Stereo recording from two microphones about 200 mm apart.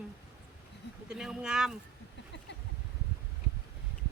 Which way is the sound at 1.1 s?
5° right (ahead or behind).